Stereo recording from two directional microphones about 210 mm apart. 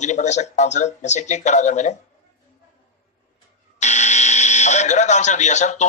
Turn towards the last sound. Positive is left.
turn(degrees=35)  # may be behind; listen again after turning